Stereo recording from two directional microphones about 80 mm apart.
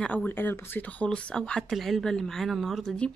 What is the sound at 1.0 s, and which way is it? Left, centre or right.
Speech, centre.